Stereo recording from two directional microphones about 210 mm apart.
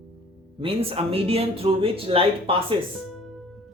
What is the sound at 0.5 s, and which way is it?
Speech, 25° right (ahead or behind).